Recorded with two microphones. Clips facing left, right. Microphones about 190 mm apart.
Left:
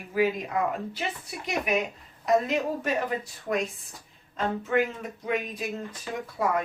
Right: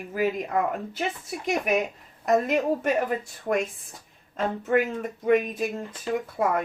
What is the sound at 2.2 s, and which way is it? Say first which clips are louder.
Speech: right 2 dB; 50° right (ahead or behind).